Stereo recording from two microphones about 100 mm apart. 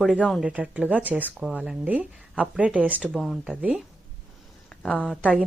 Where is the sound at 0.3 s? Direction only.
10° right (ahead or behind).